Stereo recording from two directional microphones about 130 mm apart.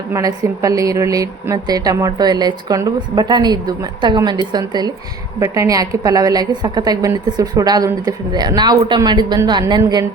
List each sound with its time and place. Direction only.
0.1 s a woman's voice: 25° right (ahead or behind)